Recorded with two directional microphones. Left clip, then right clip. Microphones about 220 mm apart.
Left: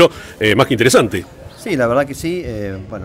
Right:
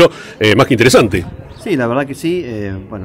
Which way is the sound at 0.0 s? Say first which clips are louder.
Right 2 dB; 15° right (ahead or behind).